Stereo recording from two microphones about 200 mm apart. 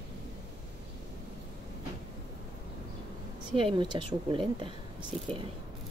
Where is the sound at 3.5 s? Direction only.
25° right (ahead or behind).